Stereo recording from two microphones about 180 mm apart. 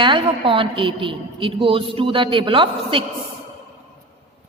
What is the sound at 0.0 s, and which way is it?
A woman's voice, 30° right (ahead or behind).